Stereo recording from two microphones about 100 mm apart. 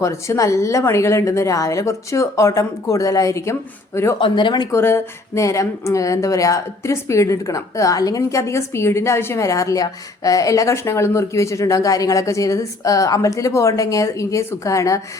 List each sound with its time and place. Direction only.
0.0 s speech: 30° left (ahead or behind)
4.2 s speech: 50° left (ahead or behind)
4.7 s speech: 25° left (ahead or behind)